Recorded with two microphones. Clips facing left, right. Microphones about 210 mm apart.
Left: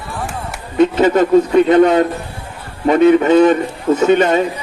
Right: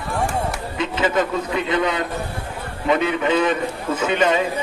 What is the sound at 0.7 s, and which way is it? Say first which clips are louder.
A man's voice: left 10 dB; 45° left (ahead or behind).